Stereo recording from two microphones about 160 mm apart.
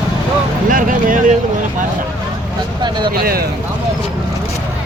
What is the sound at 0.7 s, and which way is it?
Music, 60° right (ahead or behind).